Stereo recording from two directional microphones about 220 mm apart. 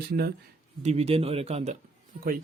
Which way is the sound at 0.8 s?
30° right (ahead or behind).